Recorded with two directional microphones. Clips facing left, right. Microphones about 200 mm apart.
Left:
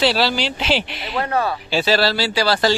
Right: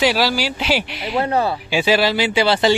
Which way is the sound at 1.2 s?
25° right (ahead or behind).